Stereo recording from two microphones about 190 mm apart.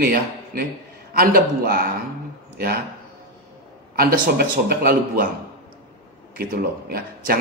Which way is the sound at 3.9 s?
45° right (ahead or behind).